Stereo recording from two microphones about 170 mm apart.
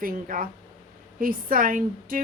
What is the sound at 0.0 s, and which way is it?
A woman's voice, 55° right (ahead or behind).